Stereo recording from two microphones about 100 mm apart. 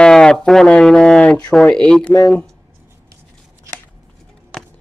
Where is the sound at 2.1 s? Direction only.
20° left (ahead or behind).